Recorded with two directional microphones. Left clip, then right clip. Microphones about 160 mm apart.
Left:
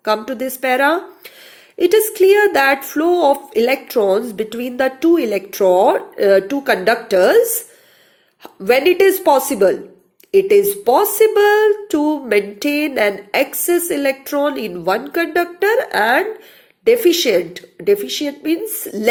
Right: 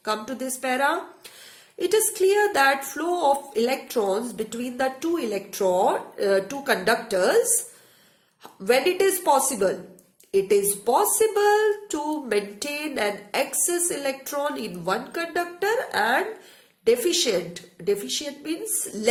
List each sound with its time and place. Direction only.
0.0 s speech: 30° left (ahead or behind)
8.6 s speech: 30° left (ahead or behind)